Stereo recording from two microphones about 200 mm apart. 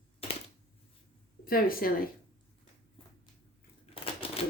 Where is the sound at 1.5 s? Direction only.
45° left (ahead or behind).